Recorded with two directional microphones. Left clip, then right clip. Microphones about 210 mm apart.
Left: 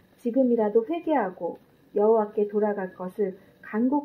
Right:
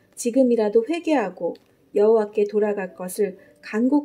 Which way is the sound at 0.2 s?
35° right (ahead or behind).